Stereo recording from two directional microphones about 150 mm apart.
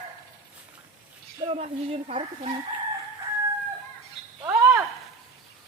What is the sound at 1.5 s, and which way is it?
Speech, 45° right (ahead or behind).